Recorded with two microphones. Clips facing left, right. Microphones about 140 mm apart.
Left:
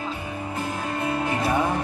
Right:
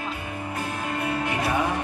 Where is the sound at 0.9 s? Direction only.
25° left (ahead or behind).